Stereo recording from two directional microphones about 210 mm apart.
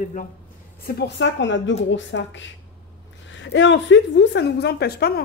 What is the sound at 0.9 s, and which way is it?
A woman's voice, 50° left (ahead or behind).